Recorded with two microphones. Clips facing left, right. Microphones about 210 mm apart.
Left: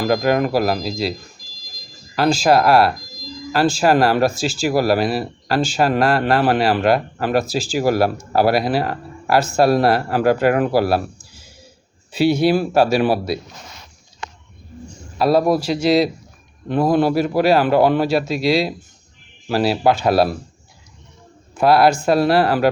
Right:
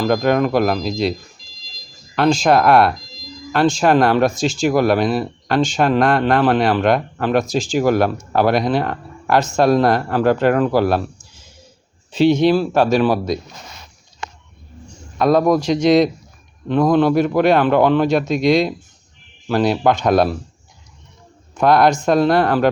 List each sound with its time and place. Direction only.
0.0 s speech: 5° left (ahead or behind)
2.4 s speech: 5° left (ahead or behind)
12.1 s speech: 10° left (ahead or behind)
15.4 s speech: 5° left (ahead or behind)
21.8 s speech: 30° left (ahead or behind)
22.1 s speech: 5° left (ahead or behind)